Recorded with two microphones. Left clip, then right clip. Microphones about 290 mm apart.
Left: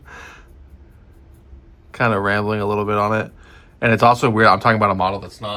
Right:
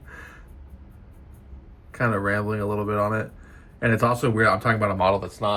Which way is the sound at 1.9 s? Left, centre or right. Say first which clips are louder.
Left 6 dB; centre.